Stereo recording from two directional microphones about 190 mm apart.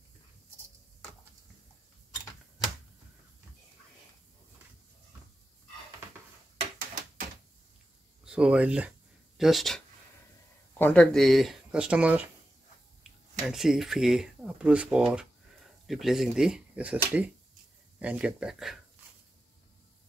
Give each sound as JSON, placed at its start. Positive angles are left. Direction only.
{"t": 8.3, "sound": "speech", "side_deg": -5}
{"t": 10.8, "sound": "speech", "side_deg": 5}
{"t": 13.5, "sound": "speech", "side_deg": 0}